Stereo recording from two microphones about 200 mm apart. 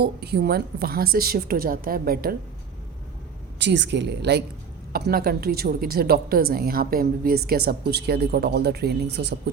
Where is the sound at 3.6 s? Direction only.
60° right (ahead or behind).